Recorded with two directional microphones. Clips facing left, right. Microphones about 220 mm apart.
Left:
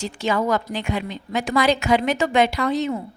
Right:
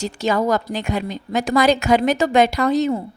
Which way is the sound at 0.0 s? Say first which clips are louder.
Right 3 dB; 40° right (ahead or behind).